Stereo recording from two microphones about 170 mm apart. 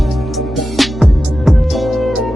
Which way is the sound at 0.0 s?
Centre (ahead or behind).